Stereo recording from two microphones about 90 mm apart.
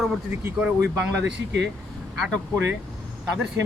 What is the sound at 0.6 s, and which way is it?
Speech, 10° right (ahead or behind).